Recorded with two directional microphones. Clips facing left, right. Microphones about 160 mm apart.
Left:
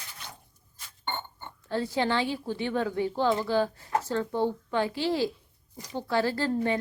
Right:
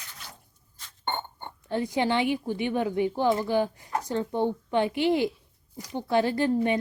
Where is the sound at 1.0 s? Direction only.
55° right (ahead or behind).